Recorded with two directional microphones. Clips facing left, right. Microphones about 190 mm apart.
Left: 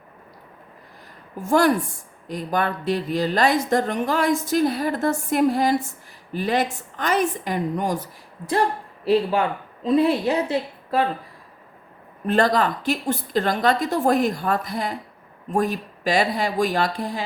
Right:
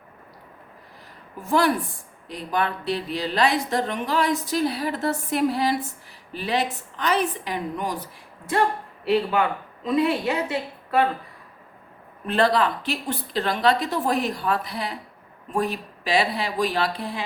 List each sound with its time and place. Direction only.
1.4 s speech: 45° left (ahead or behind)
9.8 s a woman's voice: 35° left (ahead or behind)
12.2 s speech: 45° left (ahead or behind)